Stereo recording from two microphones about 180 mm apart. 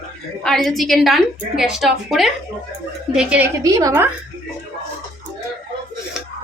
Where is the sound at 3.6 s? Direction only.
15° right (ahead or behind).